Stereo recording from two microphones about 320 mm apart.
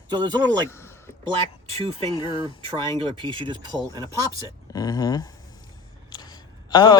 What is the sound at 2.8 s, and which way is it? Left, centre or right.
Speech, centre.